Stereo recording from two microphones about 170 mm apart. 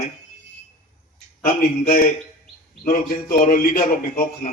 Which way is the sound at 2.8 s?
55° left (ahead or behind).